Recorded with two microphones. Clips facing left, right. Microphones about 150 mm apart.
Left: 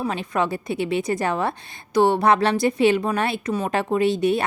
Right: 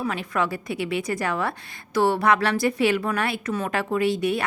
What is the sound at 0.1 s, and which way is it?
Speech, 25° left (ahead or behind).